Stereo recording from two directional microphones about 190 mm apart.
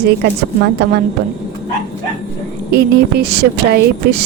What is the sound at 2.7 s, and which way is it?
Speech, 55° right (ahead or behind).